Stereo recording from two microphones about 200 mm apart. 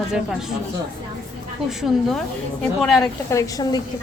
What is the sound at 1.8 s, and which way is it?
Speech, centre (ahead or behind).